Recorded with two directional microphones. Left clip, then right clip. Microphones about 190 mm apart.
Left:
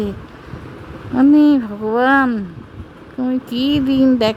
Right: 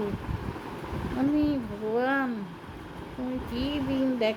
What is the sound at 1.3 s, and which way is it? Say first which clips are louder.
Speech: left 15 dB; 50° left (ahead or behind).